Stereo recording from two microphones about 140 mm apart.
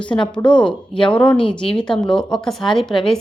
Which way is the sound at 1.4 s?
40° left (ahead or behind).